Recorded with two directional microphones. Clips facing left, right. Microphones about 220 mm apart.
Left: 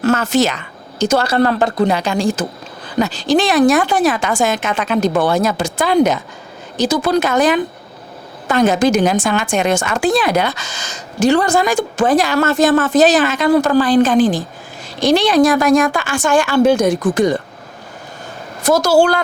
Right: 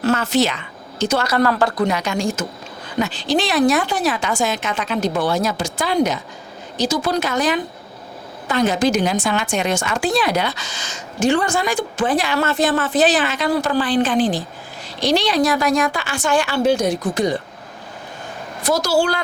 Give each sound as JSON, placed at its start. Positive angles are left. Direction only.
{"t": 0.0, "sound": "speech", "side_deg": 45}
{"t": 1.2, "sound": "a woman's voice", "side_deg": 30}
{"t": 18.6, "sound": "a woman's voice", "side_deg": 50}